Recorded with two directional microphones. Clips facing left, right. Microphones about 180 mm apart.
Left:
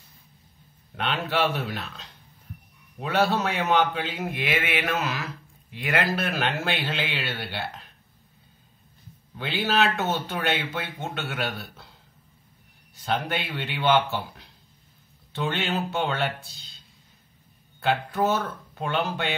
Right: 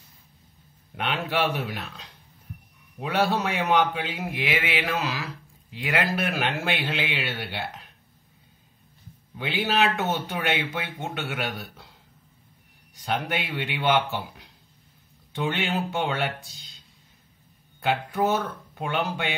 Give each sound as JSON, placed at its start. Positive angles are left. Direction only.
{"t": 0.9, "sound": "a man's voice", "side_deg": -15}
{"t": 9.4, "sound": "a man's voice", "side_deg": -15}
{"t": 12.9, "sound": "a man's voice", "side_deg": -15}
{"t": 17.7, "sound": "a man's voice", "side_deg": -15}